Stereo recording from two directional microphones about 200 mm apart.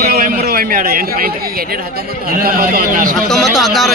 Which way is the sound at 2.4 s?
45° right (ahead or behind).